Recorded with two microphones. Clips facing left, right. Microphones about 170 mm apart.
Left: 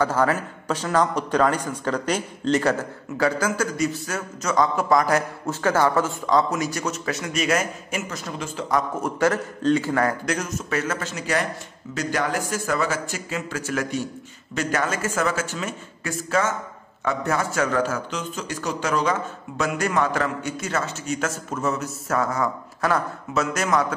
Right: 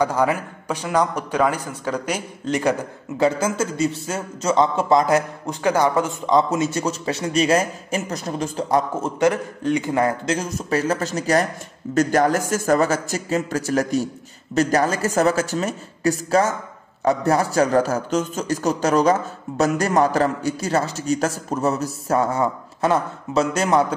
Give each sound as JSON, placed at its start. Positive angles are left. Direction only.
{"t": 0.0, "sound": "a man's voice", "side_deg": -15}